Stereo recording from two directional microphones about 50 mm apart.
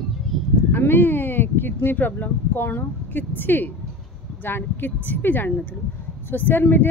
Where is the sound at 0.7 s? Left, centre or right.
Left.